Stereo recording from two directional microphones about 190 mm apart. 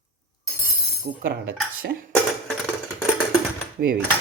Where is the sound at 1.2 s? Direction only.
75° right (ahead or behind).